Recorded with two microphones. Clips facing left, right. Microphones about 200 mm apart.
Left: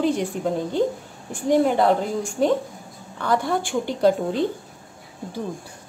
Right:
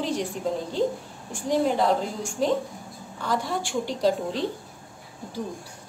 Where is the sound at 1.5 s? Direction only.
60° left (ahead or behind).